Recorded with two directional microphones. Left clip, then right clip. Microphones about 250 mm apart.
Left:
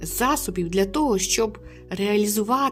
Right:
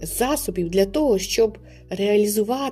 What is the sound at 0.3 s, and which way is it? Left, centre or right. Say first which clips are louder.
A woman's voice: even; centre.